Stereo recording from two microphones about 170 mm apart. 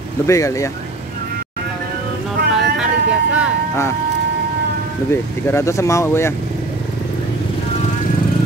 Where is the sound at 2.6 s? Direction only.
5° right (ahead or behind).